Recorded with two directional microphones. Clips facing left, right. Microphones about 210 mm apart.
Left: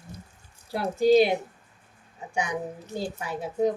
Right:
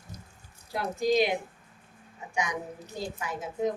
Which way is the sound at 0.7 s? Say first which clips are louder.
Left 6 dB; 30° left (ahead or behind).